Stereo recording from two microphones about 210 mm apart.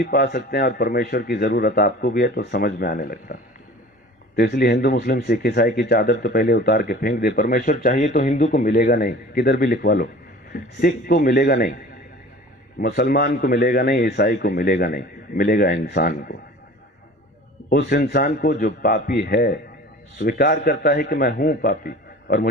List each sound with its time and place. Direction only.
0.0 s speech: 45° left (ahead or behind)
4.4 s speech: 50° left (ahead or behind)
12.8 s speech: 45° left (ahead or behind)
17.7 s speech: 40° left (ahead or behind)